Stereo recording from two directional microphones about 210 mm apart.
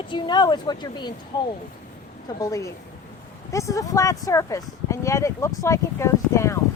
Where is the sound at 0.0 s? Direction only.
25° left (ahead or behind).